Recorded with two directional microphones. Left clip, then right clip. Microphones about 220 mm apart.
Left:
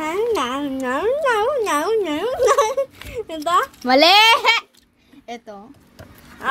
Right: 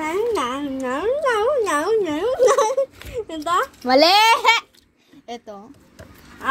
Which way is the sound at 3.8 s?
15° left (ahead or behind).